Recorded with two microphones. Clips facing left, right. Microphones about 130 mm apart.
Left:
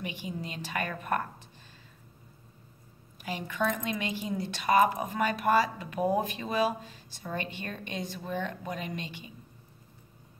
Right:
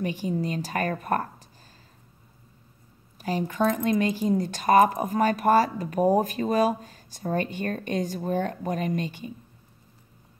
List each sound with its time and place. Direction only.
0.0 s speech: 40° right (ahead or behind)
3.2 s speech: 40° right (ahead or behind)